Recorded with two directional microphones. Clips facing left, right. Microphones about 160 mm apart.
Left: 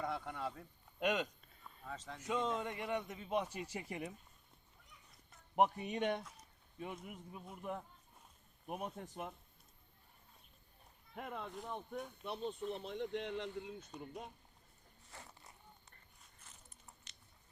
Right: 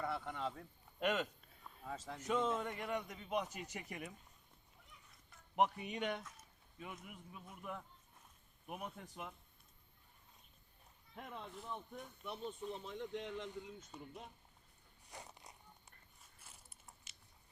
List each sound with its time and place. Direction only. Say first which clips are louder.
0.3 s speech: even; centre (ahead or behind)
1.2 s a sound: left 1 dB; 5° right (ahead or behind)
2.2 s speech: right 1 dB; 10° left (ahead or behind)
3.1 s speech: left 2 dB; 25° left (ahead or behind)
5.5 s a man's voice: left 3 dB; 40° left (ahead or behind)
11.1 s speech: left 4 dB; 60° left (ahead or behind)
13.9 s speech: left 2 dB; 5° right (ahead or behind)
15.1 s a sound: right 2 dB; 15° right (ahead or behind)
16.4 s biting: left 1 dB; 10° right (ahead or behind)